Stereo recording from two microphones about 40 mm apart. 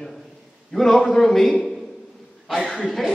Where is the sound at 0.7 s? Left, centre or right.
Centre.